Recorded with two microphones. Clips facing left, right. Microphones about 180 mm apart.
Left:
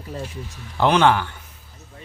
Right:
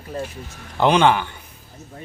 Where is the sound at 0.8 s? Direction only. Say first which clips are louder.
Right 1 dB; centre (ahead or behind).